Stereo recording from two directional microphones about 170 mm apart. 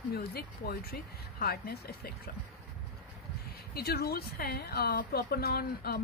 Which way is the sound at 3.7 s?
65° left (ahead or behind).